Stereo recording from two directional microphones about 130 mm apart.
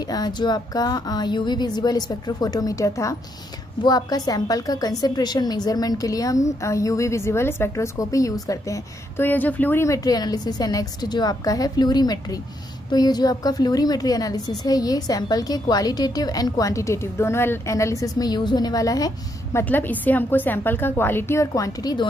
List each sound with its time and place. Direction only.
0.0 s a woman's voice: 30° left (ahead or behind)
19.6 s a woman's voice: 15° left (ahead or behind); by 22.0 s 30° left (ahead or behind)